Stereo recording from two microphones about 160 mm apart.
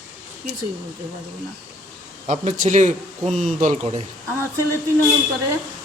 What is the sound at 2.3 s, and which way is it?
Speech, 50° right (ahead or behind).